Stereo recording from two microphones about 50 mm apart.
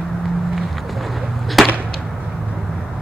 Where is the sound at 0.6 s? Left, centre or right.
Centre.